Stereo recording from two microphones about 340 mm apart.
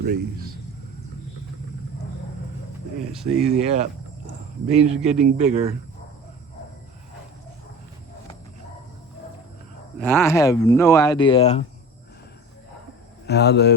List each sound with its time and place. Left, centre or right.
0.0 s a man's voice: right
3.1 s speech: centre
4.6 s speech: centre
10.0 s speech: centre
13.2 s speech: left